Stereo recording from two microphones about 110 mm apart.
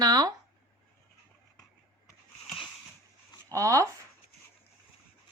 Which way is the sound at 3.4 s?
30° right (ahead or behind).